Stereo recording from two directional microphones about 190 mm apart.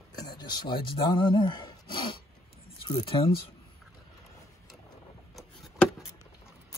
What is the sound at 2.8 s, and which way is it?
Speech, 25° left (ahead or behind).